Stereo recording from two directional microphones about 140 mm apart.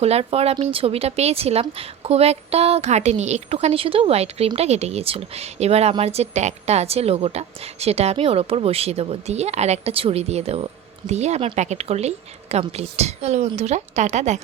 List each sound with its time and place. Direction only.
0.0 s a woman's voice: 45° right (ahead or behind)